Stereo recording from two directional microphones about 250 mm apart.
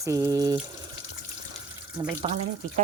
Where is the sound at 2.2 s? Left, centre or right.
Right.